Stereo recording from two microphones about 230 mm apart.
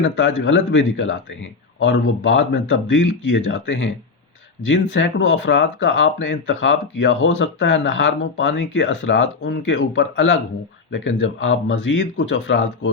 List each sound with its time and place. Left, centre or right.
0.0 s speech: left